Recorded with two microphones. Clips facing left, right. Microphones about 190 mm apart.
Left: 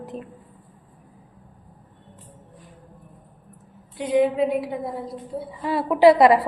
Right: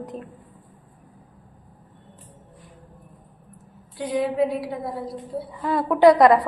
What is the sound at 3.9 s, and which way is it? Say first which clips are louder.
Speech: left 3 dB; 20° left (ahead or behind).